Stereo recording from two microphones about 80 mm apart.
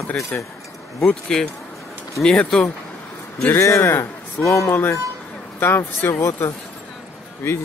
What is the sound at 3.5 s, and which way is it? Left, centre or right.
A man's voice, left.